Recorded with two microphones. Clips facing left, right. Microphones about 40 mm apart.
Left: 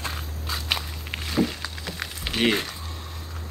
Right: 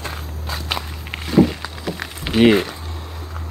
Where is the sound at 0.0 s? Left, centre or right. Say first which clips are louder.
Right 3 dB; centre.